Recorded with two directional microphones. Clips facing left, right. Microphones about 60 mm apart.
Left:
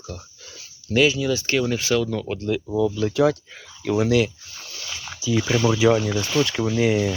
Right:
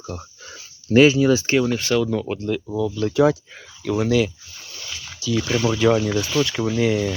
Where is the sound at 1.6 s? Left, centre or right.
Centre.